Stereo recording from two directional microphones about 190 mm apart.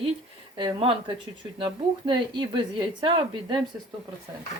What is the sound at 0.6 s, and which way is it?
Speech, 25° right (ahead or behind).